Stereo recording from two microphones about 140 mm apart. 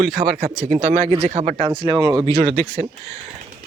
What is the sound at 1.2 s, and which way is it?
Speech, 50° right (ahead or behind).